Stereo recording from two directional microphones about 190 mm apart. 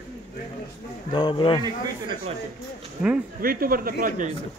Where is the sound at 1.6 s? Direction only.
25° right (ahead or behind).